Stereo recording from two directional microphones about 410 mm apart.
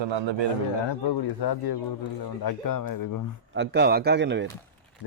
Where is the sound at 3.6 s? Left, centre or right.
Right.